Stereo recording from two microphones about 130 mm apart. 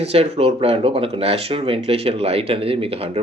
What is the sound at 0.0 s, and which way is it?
Speech, 50° right (ahead or behind).